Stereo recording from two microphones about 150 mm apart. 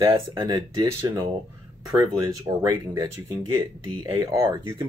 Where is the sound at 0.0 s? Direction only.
25° right (ahead or behind).